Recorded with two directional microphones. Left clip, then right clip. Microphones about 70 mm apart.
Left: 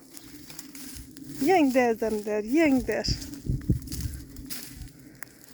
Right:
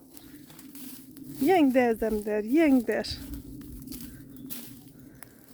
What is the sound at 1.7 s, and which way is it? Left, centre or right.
Speech, right.